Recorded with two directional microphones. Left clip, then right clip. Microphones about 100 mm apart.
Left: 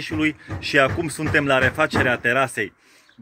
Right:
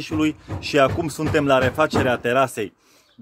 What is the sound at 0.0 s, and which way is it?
Speech, 25° right (ahead or behind).